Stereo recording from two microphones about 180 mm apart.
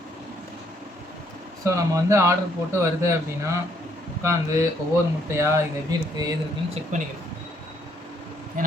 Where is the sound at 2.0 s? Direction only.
15° right (ahead or behind).